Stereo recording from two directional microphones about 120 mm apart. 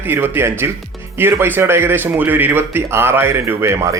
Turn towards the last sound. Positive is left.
turn(degrees=-25)  # may be behind; listen again after turning